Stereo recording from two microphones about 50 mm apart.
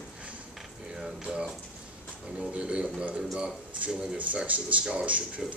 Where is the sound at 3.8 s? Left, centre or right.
Right.